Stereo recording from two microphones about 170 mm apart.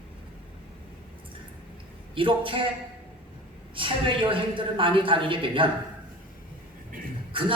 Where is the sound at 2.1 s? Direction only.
30° right (ahead or behind).